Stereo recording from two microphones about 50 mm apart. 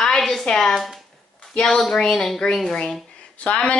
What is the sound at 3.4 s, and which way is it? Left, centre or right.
Speech, left.